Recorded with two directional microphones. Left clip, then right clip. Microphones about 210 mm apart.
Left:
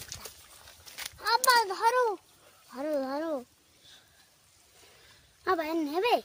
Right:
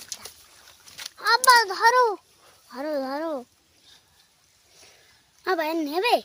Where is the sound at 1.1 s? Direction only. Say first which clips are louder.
Right 7 dB; 25° right (ahead or behind).